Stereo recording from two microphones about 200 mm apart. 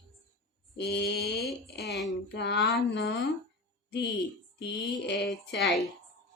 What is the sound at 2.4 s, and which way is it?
Speech, 60° left (ahead or behind).